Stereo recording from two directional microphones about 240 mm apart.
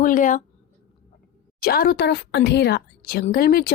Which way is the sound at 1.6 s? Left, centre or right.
Left.